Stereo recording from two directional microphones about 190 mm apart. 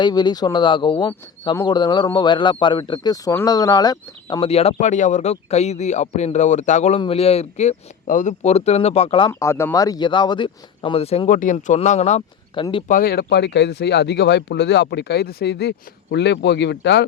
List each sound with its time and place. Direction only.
0.0 s speech: 20° left (ahead or behind)
9.3 s speech: 15° left (ahead or behind); by 12.6 s 35° left (ahead or behind)
12.9 s speech: 50° left (ahead or behind)